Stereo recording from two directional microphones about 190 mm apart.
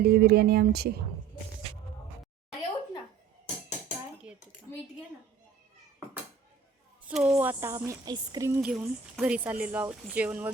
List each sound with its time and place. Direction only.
0.0 s speech: 55° right (ahead or behind)
7.0 s speech: 5° right (ahead or behind)
8.7 s speech: 5° right (ahead or behind)